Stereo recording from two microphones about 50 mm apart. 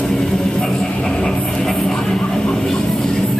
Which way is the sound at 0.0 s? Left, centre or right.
Centre.